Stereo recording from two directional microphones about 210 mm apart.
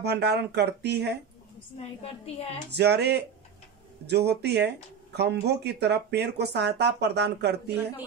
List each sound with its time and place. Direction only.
0.0 s speech: 50° right (ahead or behind)
2.2 s a woman's voice: 30° left (ahead or behind)
2.7 s speech: 50° right (ahead or behind)